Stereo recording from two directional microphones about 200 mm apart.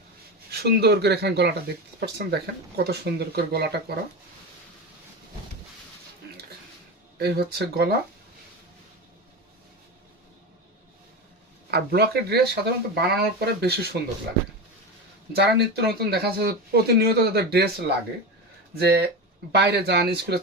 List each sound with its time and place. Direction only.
0.5 s speech: 55° right (ahead or behind)
7.2 s speech: 55° right (ahead or behind)
11.7 s speech: 55° right (ahead or behind)
15.3 s speech: 55° right (ahead or behind)